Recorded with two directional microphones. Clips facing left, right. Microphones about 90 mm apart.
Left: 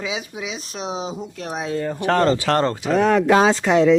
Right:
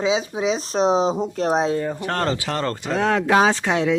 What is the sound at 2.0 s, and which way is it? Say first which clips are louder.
Speech: left 6 dB; 65° left (ahead or behind).